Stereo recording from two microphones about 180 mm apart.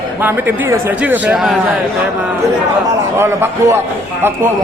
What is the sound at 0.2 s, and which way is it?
A man's voice, 10° right (ahead or behind).